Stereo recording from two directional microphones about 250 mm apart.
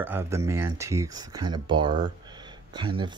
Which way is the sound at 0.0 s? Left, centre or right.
Centre.